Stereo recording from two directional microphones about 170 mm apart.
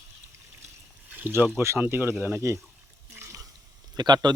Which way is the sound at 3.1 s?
20° right (ahead or behind).